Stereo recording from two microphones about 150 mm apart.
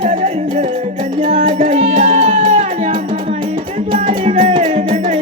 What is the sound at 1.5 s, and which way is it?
Music, 45° right (ahead or behind).